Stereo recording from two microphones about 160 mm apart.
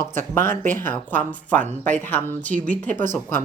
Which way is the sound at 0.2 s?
15° left (ahead or behind).